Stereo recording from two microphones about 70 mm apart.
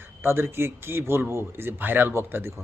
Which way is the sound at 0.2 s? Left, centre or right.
Right.